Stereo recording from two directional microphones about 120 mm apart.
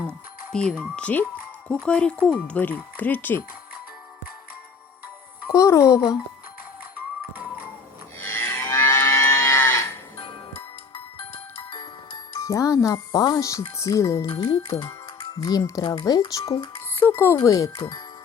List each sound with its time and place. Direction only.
0.0 s music: 10° left (ahead or behind)
0.9 s speech: 10° left (ahead or behind)
5.5 s speech: 25° left (ahead or behind)
8.2 s livestock: 20° left (ahead or behind)
10.9 s music: 45° left (ahead or behind)
12.4 s speech: 25° left (ahead or behind)
14.4 s speech: 45° left (ahead or behind)
15.4 s speech: 30° left (ahead or behind)
17.0 s a child's voice: 20° left (ahead or behind)
17.4 s speech: 30° left (ahead or behind)